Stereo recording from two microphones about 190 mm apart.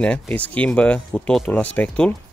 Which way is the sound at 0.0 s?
5° left (ahead or behind).